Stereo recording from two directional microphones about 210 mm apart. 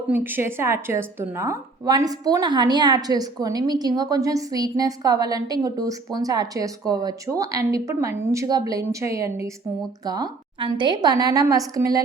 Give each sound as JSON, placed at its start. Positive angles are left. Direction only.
{"t": 0.1, "sound": "a woman's voice", "side_deg": -10}